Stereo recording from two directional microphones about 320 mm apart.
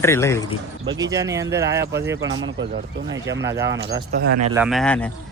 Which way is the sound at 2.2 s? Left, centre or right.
Right.